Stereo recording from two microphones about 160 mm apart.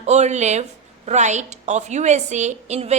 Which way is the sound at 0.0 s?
45° right (ahead or behind).